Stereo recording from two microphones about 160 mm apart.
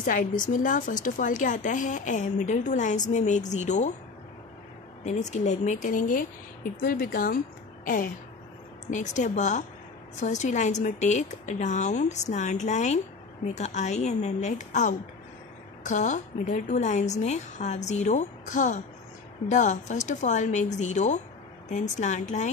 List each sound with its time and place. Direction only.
0.0 s speech: 55° left (ahead or behind)
5.0 s speech: 45° left (ahead or behind); by 7.3 s 65° left (ahead or behind)
7.8 s a sound: 55° left (ahead or behind)
8.9 s speech: 50° left (ahead or behind)